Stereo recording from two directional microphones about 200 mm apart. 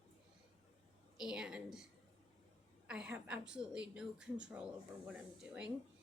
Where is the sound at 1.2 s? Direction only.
5° right (ahead or behind).